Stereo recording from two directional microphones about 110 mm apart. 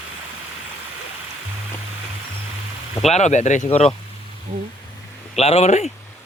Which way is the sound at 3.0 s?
90° left.